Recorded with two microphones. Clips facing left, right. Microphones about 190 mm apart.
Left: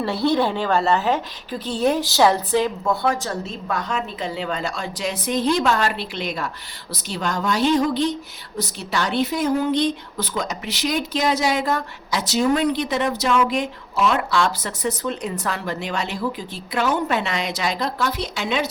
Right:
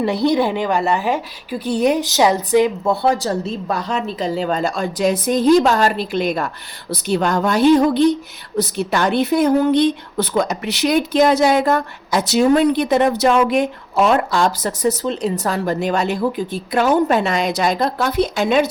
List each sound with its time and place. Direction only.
0.0 s a woman's voice: 15° right (ahead or behind)
2.8 s a woman's voice: 30° right (ahead or behind); by 18.6 s 50° right (ahead or behind)